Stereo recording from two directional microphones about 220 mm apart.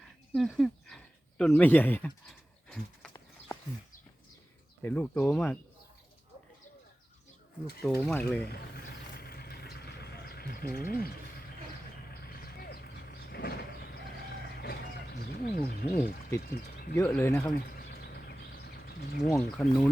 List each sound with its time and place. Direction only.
0.3 s speech: centre (ahead or behind)
2.6 s horse: 5° left (ahead or behind)
4.8 s speech: 10° left (ahead or behind)
7.8 s speech: 5° left (ahead or behind)
8.7 s vehicle: 45° left (ahead or behind)
12.2 s vehicle: 45° left (ahead or behind)
14.6 s wild animals: 45° left (ahead or behind)
16.4 s speech: 40° left (ahead or behind)
17.0 s speech: 10° left (ahead or behind)
17.7 s bird: 45° left (ahead or behind)
19.3 s speech: 5° left (ahead or behind)